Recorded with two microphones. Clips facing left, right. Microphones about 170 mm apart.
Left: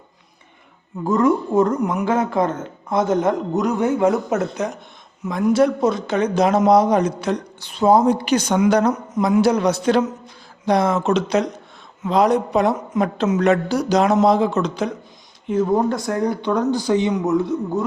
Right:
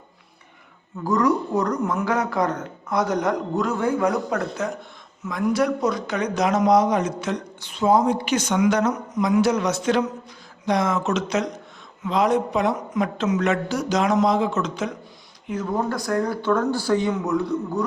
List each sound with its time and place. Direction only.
1.0 s a man's voice: 25° left (ahead or behind)
15.4 s speech: 25° left (ahead or behind)